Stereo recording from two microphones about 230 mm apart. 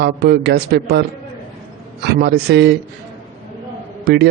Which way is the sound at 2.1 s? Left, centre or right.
Right.